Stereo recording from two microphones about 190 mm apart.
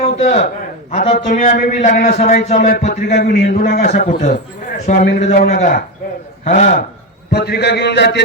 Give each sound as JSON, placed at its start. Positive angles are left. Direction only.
{"t": 0.0, "sound": "a man's voice", "side_deg": 35}
{"t": 3.1, "sound": "a man's voice", "side_deg": 55}
{"t": 7.3, "sound": "a man's voice", "side_deg": 60}